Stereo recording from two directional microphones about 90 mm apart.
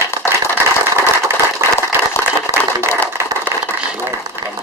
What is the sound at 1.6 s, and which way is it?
Applause, 30° right (ahead or behind).